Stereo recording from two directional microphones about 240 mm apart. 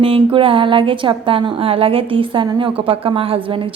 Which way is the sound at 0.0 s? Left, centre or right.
Right.